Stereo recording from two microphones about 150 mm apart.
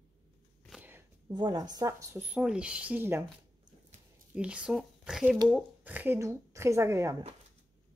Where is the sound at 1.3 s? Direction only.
30° right (ahead or behind).